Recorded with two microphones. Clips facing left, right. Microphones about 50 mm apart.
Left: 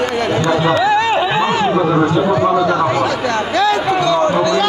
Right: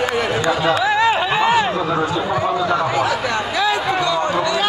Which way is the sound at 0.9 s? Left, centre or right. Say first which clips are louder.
Left 2 dB; centre.